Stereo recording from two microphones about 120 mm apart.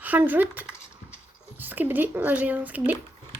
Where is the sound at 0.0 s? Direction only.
15° right (ahead or behind).